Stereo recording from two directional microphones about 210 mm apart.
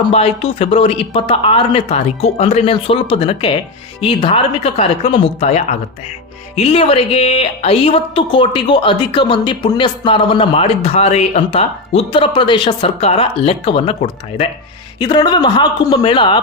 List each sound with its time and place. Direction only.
0.0 s speech: 30° left (ahead or behind)